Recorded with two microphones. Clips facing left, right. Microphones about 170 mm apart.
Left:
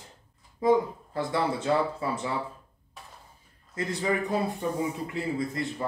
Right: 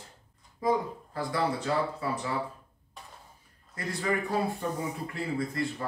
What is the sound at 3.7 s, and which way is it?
A man's voice, 20° left (ahead or behind).